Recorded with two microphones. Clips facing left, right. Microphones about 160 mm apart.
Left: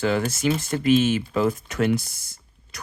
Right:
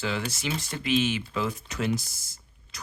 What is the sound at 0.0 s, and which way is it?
Speech, 50° left (ahead or behind).